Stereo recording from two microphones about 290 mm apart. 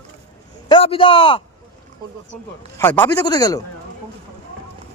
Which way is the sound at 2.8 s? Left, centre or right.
Centre.